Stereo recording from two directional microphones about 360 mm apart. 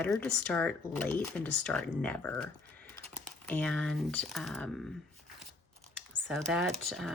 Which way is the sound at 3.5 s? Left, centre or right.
Centre.